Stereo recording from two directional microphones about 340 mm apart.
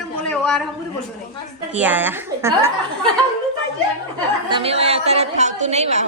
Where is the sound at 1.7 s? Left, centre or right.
Centre.